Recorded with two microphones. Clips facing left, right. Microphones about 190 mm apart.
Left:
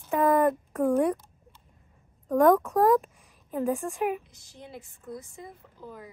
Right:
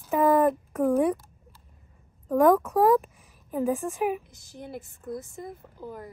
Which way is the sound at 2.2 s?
5° right (ahead or behind).